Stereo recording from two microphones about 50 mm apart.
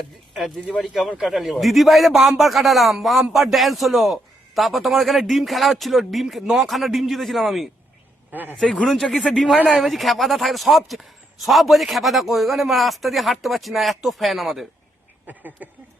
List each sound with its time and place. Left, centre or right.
0.3 s a man's voice: centre
8.3 s speech: right
8.6 s speech: centre
9.3 s a man's voice: centre
15.3 s a sound: right